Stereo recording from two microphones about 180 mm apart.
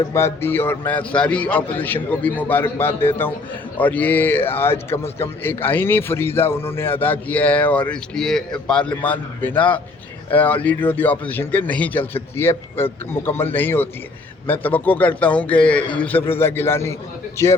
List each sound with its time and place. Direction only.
0.1 s speech: 15° left (ahead or behind)